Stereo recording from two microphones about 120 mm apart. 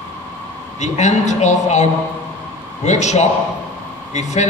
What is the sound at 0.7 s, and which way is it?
A man's voice, 75° left (ahead or behind).